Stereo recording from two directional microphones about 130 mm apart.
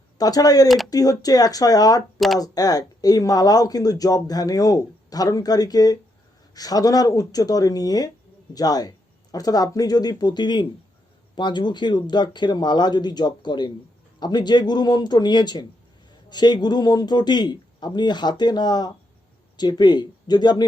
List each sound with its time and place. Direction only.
0.2 s a man's voice: 30° left (ahead or behind)